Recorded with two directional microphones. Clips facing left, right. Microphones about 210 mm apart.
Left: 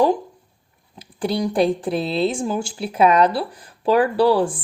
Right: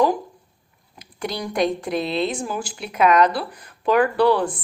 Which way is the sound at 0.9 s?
30° left (ahead or behind).